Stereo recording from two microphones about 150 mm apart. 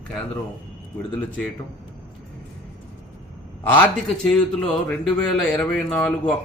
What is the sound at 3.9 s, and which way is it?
Speech, 5° left (ahead or behind).